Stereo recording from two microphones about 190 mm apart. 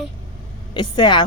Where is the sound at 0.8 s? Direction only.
25° left (ahead or behind).